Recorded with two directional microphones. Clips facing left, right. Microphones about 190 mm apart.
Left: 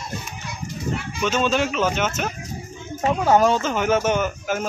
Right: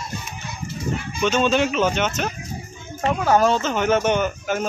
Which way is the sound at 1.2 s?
5° left (ahead or behind).